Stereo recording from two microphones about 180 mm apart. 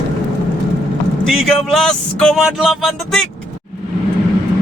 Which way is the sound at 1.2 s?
Centre (ahead or behind).